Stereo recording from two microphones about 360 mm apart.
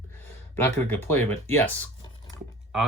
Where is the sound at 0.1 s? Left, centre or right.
Centre.